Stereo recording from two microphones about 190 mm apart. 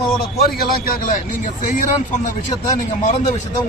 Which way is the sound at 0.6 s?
45° left (ahead or behind).